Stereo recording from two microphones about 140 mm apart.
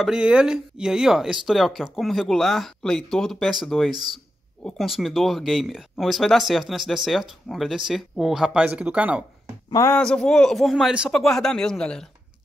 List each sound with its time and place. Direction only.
0.0 s speech: 5° right (ahead or behind)
9.7 s speech: 25° left (ahead or behind)
9.9 s speech: 5° left (ahead or behind)